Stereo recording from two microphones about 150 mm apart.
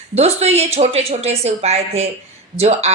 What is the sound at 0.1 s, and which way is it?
A woman's voice, 45° right (ahead or behind).